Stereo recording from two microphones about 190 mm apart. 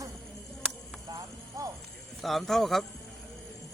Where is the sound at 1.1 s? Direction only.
20° right (ahead or behind).